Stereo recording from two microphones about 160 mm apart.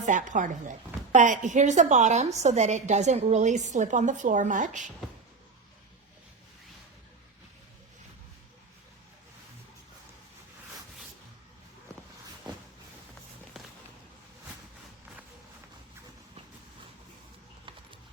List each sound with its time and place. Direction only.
0.0 s speech: 50° right (ahead or behind)